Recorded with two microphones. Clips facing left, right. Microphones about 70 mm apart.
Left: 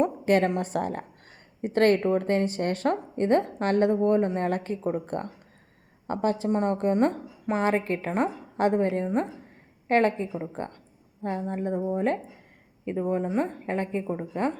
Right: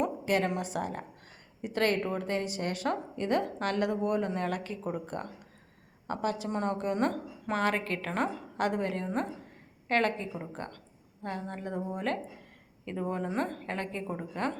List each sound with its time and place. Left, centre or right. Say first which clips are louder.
0.0 s a woman's voice: left 6 dB; left